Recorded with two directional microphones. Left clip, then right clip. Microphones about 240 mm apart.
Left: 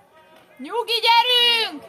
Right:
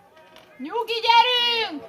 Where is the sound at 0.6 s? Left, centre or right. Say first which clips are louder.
Left 4 dB; left.